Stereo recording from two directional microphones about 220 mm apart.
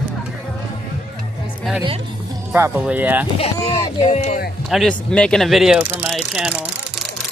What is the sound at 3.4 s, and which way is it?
Speech, 25° left (ahead or behind).